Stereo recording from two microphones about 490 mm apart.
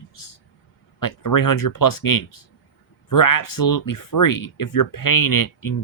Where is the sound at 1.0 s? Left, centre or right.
Left.